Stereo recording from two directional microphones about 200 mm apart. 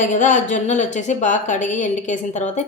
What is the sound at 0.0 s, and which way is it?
A woman's voice, 40° left (ahead or behind).